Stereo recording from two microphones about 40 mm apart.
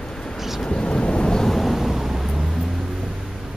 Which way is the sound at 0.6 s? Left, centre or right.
Left.